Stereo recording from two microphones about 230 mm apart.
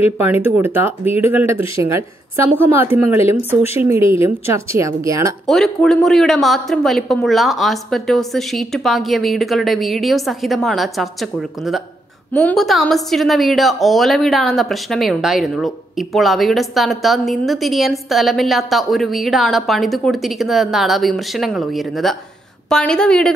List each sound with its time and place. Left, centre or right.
0.2 s a woman's voice: centre
5.5 s a woman's voice: centre